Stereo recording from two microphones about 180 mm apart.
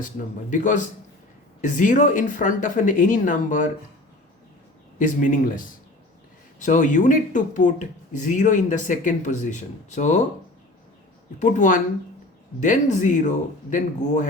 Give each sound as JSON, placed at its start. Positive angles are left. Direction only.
{"t": 0.5, "sound": "speech", "side_deg": 45}
{"t": 4.9, "sound": "speech", "side_deg": 45}
{"t": 11.3, "sound": "speech", "side_deg": 45}